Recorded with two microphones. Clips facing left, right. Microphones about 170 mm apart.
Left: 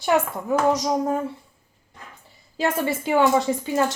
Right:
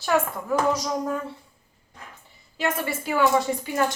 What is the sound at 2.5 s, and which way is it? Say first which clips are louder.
Speech: left 4 dB; 25° left (ahead or behind).